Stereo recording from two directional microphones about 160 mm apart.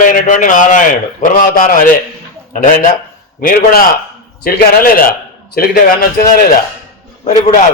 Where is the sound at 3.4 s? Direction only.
65° left (ahead or behind).